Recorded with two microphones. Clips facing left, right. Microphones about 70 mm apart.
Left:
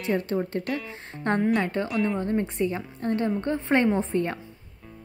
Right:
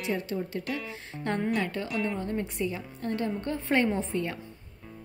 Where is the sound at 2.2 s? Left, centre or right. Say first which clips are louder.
Left 5 dB; left.